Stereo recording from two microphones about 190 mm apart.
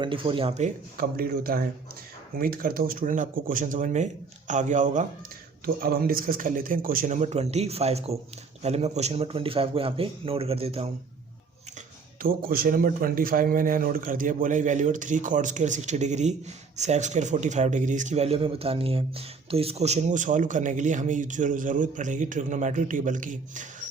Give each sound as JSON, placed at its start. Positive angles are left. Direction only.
{"t": 0.0, "sound": "a man's voice", "side_deg": -25}
{"t": 5.6, "sound": "a man's voice", "side_deg": -50}
{"t": 12.2, "sound": "a man's voice", "side_deg": -50}